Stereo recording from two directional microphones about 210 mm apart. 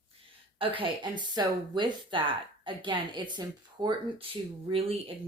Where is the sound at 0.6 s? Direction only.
25° right (ahead or behind).